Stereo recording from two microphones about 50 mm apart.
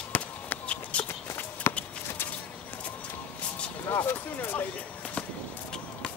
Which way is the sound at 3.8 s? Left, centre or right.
Left.